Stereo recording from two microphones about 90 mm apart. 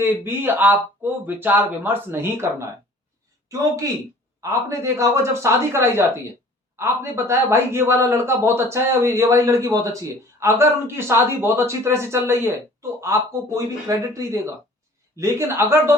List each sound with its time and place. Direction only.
0.0 s a man's voice: 25° right (ahead or behind)
3.5 s a man's voice: 35° right (ahead or behind)